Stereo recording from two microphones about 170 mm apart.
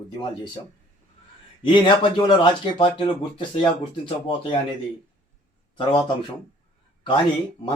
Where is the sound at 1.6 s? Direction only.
30° left (ahead or behind).